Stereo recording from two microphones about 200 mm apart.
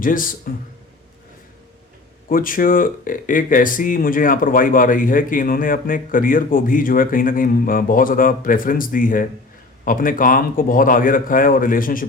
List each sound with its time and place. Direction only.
0.0 s speech: 45° left (ahead or behind)
2.3 s speech: 45° left (ahead or behind)